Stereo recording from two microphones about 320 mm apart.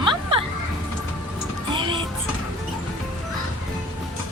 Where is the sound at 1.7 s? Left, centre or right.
Centre.